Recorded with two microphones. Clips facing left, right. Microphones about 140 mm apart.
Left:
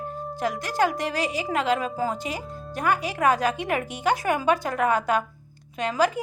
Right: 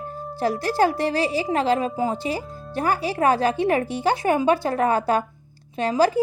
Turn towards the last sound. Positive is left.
turn(degrees=-30)  # may be behind; listen again after turning